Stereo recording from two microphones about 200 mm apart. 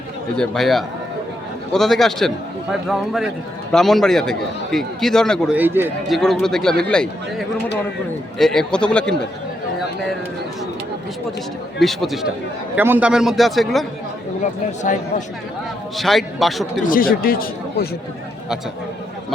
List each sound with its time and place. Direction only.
0.3 s a man's voice: centre (ahead or behind)
5.5 s a man's voice: 10° right (ahead or behind)
6.1 s a man's voice: centre (ahead or behind)
11.8 s a man's voice: centre (ahead or behind)
16.0 s a man's voice: centre (ahead or behind)
16.8 s speech: 45° left (ahead or behind)